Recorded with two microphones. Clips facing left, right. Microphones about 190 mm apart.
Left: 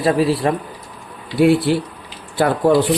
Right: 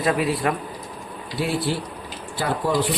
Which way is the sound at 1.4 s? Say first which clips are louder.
Left 11 dB; 60° left (ahead or behind).